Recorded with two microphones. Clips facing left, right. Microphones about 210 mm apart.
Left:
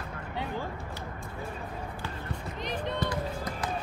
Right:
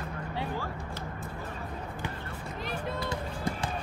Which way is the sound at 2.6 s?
10° right (ahead or behind).